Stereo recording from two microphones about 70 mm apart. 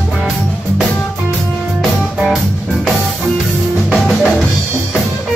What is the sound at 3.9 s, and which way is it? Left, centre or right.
Drum kit, centre.